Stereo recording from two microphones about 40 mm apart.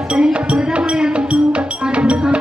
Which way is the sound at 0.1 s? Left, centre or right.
Right.